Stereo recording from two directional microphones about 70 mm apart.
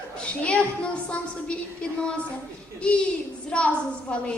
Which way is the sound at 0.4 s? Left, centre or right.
Centre.